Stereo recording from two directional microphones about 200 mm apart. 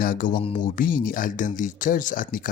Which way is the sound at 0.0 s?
45° left (ahead or behind).